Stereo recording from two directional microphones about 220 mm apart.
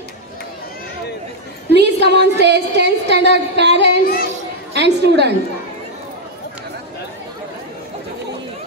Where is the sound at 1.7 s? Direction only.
50° right (ahead or behind).